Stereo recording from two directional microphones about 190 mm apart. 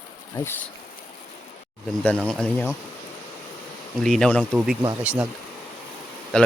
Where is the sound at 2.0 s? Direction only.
5° left (ahead or behind).